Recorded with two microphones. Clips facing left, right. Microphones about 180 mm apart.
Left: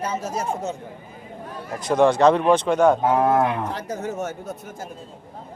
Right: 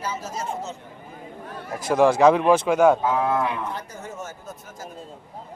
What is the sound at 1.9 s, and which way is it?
Speech, 5° right (ahead or behind).